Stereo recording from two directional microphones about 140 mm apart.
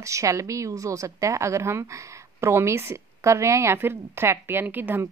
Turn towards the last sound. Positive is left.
turn(degrees=-15)  # may be behind; listen again after turning